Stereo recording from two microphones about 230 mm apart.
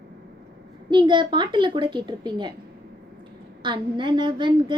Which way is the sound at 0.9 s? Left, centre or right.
Right.